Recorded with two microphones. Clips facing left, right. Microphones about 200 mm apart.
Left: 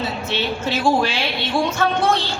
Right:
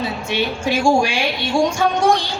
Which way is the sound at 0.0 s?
15° right (ahead or behind).